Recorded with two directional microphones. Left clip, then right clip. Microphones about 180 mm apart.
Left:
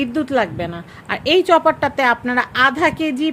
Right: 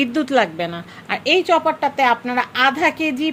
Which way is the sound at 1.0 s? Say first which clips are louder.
Left 2 dB; 20° left (ahead or behind).